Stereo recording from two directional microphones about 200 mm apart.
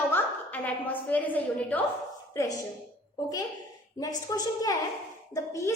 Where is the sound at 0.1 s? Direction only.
10° left (ahead or behind).